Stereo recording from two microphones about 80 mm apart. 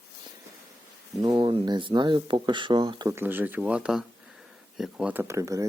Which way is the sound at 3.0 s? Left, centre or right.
Right.